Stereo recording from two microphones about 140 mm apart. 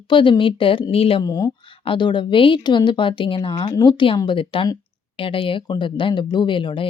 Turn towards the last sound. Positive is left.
turn(degrees=35)  # may be behind; listen again after turning